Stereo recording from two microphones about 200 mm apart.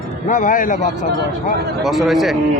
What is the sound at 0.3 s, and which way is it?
Speech, 40° left (ahead or behind).